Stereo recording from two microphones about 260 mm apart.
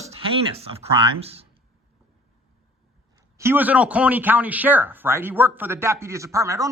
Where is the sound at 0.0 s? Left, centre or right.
Right.